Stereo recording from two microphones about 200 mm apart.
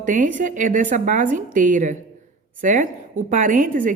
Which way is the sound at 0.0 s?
40° right (ahead or behind).